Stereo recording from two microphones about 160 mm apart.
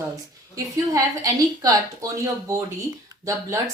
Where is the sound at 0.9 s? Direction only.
20° right (ahead or behind).